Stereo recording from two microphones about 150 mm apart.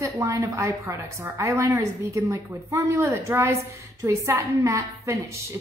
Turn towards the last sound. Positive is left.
turn(degrees=-20)  # may be behind; listen again after turning